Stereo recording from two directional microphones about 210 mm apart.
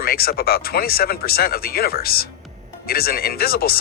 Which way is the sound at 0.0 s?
45° left (ahead or behind).